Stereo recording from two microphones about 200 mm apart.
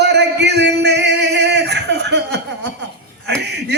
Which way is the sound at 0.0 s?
55° right (ahead or behind).